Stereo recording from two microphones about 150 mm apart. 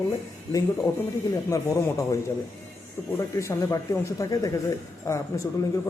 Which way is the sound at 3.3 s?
20° left (ahead or behind).